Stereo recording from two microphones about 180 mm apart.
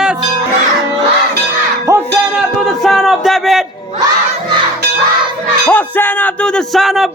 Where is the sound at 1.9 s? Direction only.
15° right (ahead or behind).